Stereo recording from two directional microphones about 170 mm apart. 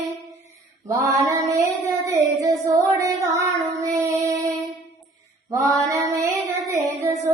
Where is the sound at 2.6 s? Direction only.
20° right (ahead or behind).